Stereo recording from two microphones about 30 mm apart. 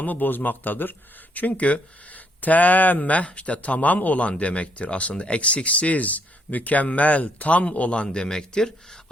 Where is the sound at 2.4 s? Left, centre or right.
Left.